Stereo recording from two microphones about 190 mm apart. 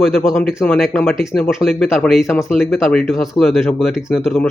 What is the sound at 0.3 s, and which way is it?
A man's voice, centre (ahead or behind).